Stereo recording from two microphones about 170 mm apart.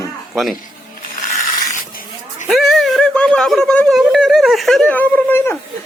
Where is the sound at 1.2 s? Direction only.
50° left (ahead or behind).